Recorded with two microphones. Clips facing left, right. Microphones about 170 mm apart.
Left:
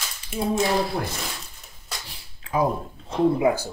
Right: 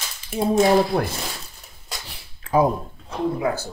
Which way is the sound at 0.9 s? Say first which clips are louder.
Right 6 dB; 65° right (ahead or behind).